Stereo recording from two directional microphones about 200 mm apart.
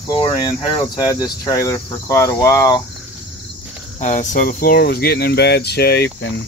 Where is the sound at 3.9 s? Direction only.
35° left (ahead or behind); by 6.4 s 55° left (ahead or behind).